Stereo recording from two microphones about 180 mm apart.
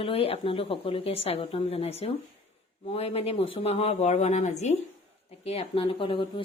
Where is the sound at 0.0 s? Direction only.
30° left (ahead or behind).